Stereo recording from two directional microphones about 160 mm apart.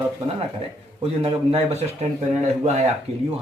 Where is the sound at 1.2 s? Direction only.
35° right (ahead or behind).